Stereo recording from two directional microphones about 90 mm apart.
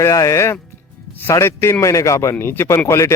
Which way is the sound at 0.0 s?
35° left (ahead or behind).